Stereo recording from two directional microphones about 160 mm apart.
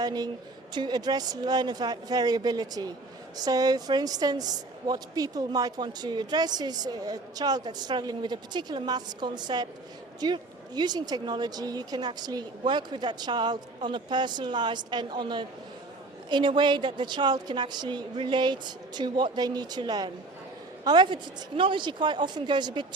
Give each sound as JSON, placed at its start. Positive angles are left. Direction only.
{"t": 0.0, "sound": "a woman's voice", "side_deg": -25}